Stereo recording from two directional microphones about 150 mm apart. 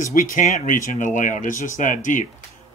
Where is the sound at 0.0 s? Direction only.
65° left (ahead or behind).